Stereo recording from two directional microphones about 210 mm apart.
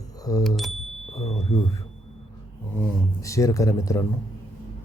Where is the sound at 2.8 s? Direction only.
15° left (ahead or behind).